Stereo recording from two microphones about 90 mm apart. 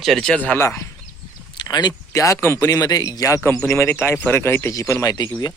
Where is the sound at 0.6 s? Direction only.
30° left (ahead or behind).